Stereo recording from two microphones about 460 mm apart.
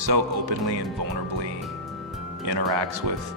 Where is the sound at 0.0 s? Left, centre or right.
Right.